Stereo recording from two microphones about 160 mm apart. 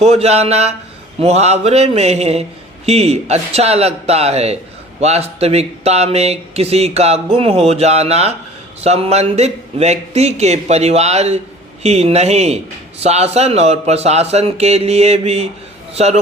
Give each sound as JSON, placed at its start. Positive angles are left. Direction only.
{"t": 0.0, "sound": "a man's voice", "side_deg": -40}